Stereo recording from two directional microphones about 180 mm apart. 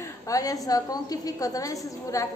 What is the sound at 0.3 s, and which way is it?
A woman's voice, 20° left (ahead or behind).